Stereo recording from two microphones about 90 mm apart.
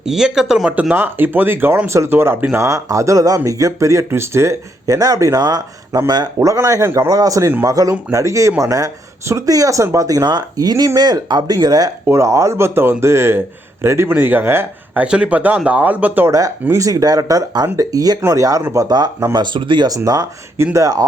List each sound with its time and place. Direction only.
0.0 s speech: 5° right (ahead or behind)
0.8 s speech: 20° right (ahead or behind)
2.6 s speech: 35° right (ahead or behind)
12.0 s speech: 30° right (ahead or behind)
15.0 s speech: 10° right (ahead or behind)
16.6 s speech: 35° right (ahead or behind)
18.2 s speech: 30° right (ahead or behind)
18.7 s speech: 45° right (ahead or behind)
19.5 s speech: 65° right (ahead or behind)
20.7 s speech: 40° right (ahead or behind)